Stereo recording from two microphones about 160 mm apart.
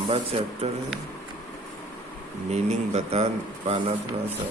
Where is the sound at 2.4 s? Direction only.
45° right (ahead or behind).